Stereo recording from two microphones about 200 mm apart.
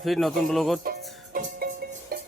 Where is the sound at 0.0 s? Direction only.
Centre (ahead or behind).